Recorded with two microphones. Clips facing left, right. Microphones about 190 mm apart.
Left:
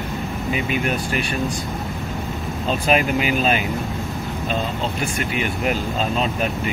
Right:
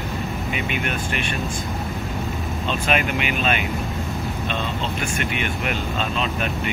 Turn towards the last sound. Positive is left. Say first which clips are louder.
# left 3 dB
turn(degrees=35)  # may be behind; listen again after turning